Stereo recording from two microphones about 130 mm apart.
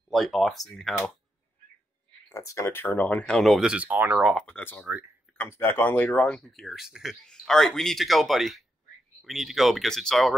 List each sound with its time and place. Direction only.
0.1 s speech: centre (ahead or behind)
2.2 s speech: 25° left (ahead or behind); by 4.3 s 15° right (ahead or behind)
4.3 s speech: 10° left (ahead or behind)